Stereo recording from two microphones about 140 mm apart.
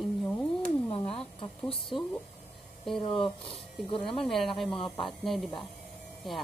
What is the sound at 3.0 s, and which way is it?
Speech, 40° left (ahead or behind).